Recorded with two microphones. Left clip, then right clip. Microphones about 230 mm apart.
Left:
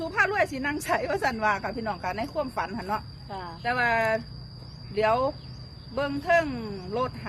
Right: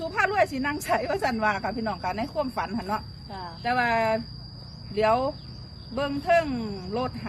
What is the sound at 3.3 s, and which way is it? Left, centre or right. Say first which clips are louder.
Cricket: left 1 dB; left.